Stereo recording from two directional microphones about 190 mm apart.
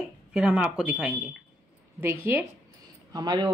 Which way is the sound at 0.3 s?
5° right (ahead or behind).